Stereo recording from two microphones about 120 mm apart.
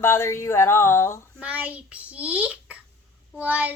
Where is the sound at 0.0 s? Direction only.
20° left (ahead or behind).